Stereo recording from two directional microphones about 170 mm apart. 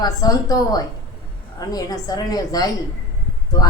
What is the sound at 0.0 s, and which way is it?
A woman's voice, 20° left (ahead or behind).